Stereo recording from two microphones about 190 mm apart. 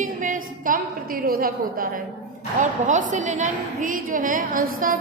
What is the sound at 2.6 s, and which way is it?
A woman's voice, 40° right (ahead or behind).